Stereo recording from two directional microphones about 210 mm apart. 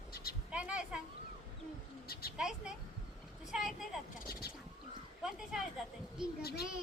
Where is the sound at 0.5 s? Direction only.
5° right (ahead or behind).